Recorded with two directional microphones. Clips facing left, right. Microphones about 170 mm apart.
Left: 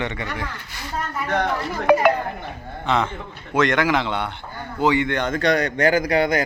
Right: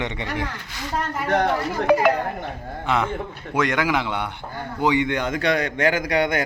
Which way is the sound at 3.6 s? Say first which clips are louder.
Left 2 dB; 10° right (ahead or behind).